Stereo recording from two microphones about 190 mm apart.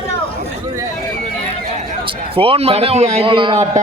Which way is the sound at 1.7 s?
30° right (ahead or behind).